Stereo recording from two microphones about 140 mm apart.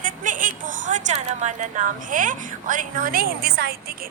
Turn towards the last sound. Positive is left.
turn(degrees=-90)